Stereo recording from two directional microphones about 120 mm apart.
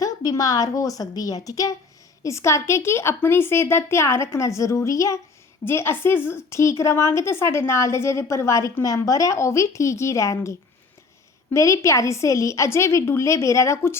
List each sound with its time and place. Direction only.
0.0 s a woman's voice: 30° left (ahead or behind)
11.5 s a woman's voice: 25° left (ahead or behind)